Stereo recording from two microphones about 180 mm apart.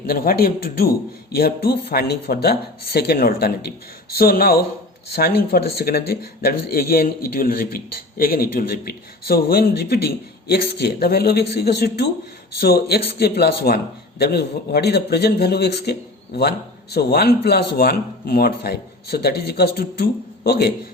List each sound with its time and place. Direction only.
0.1 s a man's voice: 55° left (ahead or behind)